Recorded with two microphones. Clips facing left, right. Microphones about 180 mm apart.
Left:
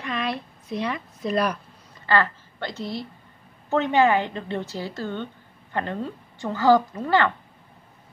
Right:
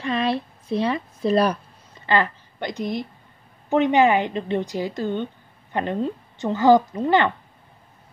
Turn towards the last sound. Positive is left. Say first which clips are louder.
# right 3 dB
turn(degrees=-20)  # may be behind; listen again after turning